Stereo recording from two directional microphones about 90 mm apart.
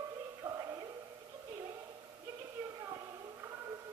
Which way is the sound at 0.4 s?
40° right (ahead or behind).